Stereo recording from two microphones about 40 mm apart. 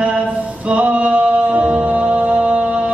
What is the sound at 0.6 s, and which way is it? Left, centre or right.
Music, right.